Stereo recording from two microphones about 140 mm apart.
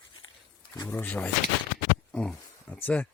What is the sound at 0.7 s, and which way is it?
Speech, 15° left (ahead or behind).